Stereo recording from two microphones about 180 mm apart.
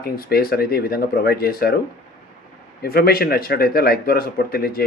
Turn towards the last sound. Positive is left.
turn(degrees=55)  # may be behind; listen again after turning